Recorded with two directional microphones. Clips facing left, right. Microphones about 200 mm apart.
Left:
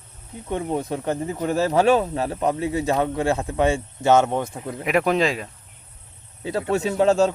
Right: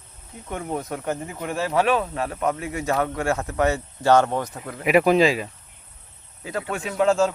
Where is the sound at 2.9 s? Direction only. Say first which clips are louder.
Left 2 dB; 20° left (ahead or behind).